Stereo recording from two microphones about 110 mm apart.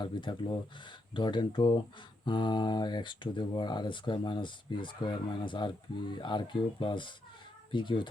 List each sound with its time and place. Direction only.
0.0 s speech: 45° left (ahead or behind)